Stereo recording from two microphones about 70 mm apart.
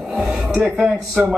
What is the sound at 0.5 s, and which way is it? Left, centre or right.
Speech, centre.